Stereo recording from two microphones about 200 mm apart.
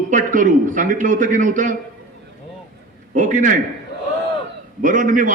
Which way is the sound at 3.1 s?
40° right (ahead or behind).